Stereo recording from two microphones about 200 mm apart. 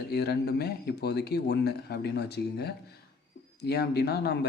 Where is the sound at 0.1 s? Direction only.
55° left (ahead or behind).